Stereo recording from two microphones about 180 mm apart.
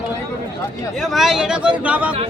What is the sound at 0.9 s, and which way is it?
A man's voice, centre (ahead or behind).